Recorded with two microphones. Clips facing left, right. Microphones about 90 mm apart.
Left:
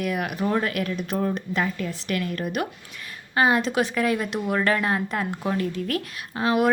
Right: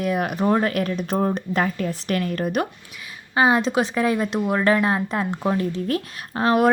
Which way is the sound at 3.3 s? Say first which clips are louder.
Right 2 dB; 20° right (ahead or behind).